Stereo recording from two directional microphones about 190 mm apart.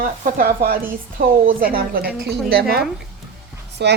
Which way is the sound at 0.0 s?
50° right (ahead or behind).